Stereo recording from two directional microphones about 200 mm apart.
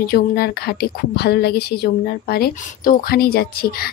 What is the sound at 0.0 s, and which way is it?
A woman's voice, 50° left (ahead or behind).